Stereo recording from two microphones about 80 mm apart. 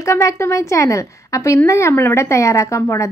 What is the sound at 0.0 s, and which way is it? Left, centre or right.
Speech, left.